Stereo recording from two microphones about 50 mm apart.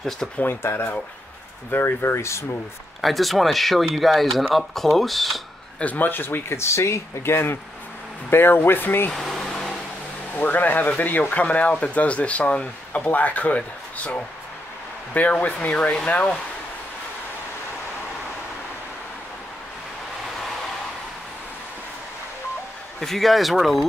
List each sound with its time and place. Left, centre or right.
0.5 s speech: left
3.0 s speech: centre
5.8 s speech: left
6.5 s speech: left
9.1 s a sound: centre
10.3 s speech: left
22.9 s speech: centre